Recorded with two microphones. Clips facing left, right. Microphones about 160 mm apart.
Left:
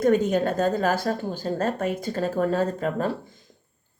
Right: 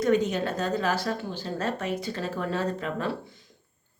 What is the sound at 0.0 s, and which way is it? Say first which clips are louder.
A woman's voice: left 4 dB; 50° left (ahead or behind).